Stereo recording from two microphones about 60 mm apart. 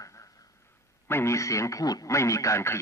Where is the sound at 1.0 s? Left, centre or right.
Left.